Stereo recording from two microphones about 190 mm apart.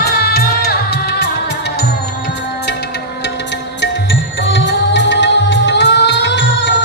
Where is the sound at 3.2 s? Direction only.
65° left (ahead or behind).